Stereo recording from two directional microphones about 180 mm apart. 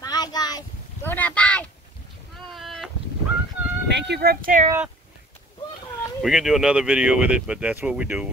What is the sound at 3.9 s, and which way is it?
Speech, 65° right (ahead or behind).